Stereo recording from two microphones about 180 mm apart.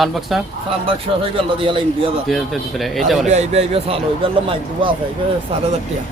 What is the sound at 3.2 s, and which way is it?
A man's voice, 40° right (ahead or behind).